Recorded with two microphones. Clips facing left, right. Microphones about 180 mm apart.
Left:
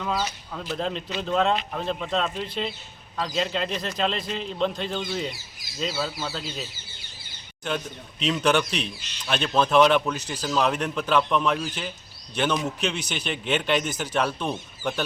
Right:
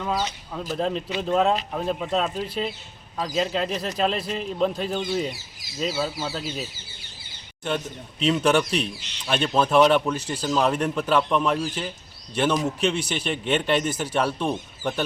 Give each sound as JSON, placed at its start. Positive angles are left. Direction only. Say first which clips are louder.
{"t": 0.0, "sound": "a man's voice", "louder": "right 1 dB", "side_deg": -10}
{"t": 8.2, "sound": "a man's voice", "louder": "right 2 dB", "side_deg": -5}
{"t": 10.2, "sound": "speech", "louder": "right 3 dB", "side_deg": -30}
{"t": 10.6, "sound": "a man's voice", "louder": "right 1 dB", "side_deg": 0}